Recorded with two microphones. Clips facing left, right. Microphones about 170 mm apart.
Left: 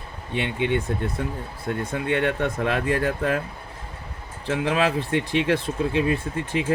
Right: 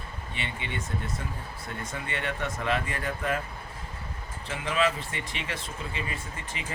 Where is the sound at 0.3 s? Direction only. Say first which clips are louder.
Left 13 dB; 60° left (ahead or behind).